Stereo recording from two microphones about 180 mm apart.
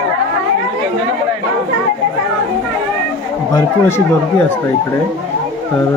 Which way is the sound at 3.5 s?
15° left (ahead or behind).